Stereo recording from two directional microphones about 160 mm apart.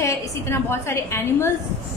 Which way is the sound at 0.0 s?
15° left (ahead or behind).